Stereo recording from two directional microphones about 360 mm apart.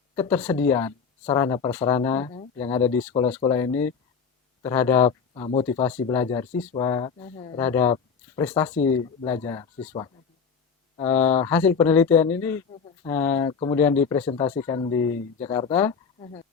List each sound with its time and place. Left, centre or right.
0.2 s speech: centre
5.0 s speech: centre
5.6 s speech: centre